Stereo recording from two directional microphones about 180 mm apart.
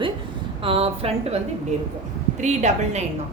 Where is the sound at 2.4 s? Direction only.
40° right (ahead or behind).